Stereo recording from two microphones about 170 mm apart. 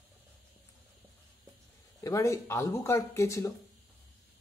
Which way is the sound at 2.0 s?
20° left (ahead or behind).